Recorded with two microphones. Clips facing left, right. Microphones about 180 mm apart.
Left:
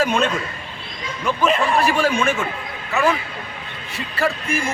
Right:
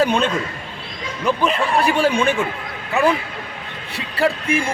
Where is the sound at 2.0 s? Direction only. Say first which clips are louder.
Right 2 dB; 30° right (ahead or behind).